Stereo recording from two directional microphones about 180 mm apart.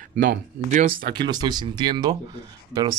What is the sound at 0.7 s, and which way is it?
Speech, 50° right (ahead or behind).